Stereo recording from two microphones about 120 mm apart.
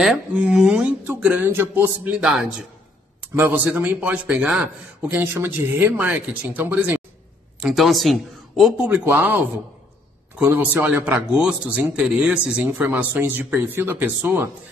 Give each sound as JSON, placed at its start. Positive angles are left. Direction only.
{"t": 0.3, "sound": "a man's voice", "side_deg": -10}
{"t": 7.6, "sound": "speech", "side_deg": 0}
{"t": 8.8, "sound": "a man's voice", "side_deg": -15}
{"t": 10.4, "sound": "a man's voice", "side_deg": -15}